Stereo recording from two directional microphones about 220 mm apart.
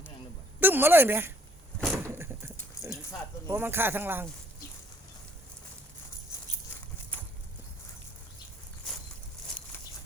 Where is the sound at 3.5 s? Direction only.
10° right (ahead or behind).